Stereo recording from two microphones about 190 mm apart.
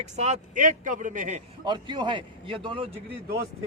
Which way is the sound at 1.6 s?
25° right (ahead or behind).